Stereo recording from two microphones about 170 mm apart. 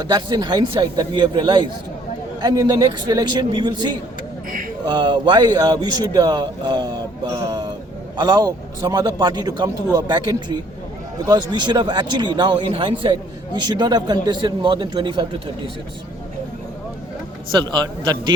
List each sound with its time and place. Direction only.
0.0 s a man's voice: 25° right (ahead or behind)
7.3 s a sound: 20° right (ahead or behind)
8.1 s a man's voice: 25° right (ahead or behind)
17.5 s a man's voice: 25° right (ahead or behind)